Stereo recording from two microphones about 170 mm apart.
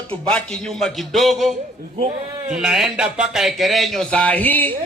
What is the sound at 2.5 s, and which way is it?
Speech, 5° right (ahead or behind).